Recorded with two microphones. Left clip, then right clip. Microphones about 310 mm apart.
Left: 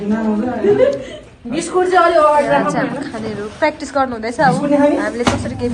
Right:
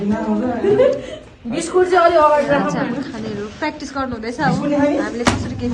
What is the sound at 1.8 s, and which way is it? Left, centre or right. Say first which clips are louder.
Speech: left 2 dB; left.